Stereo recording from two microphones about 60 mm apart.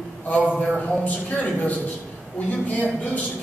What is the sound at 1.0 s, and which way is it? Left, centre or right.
A man's voice, left.